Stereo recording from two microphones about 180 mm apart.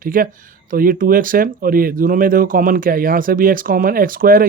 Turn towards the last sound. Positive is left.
turn(degrees=-50)  # may be behind; listen again after turning